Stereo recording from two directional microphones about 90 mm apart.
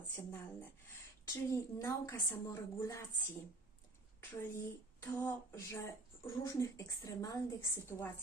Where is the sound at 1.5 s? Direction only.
35° left (ahead or behind).